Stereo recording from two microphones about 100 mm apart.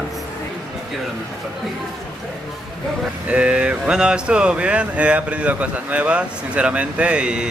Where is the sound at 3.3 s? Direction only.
10° right (ahead or behind).